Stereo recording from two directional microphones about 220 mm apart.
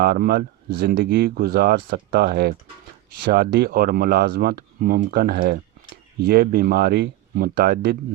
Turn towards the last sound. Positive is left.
turn(degrees=-45)  # may be behind; listen again after turning